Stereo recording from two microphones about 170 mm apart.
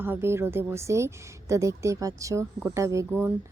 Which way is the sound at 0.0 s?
15° right (ahead or behind).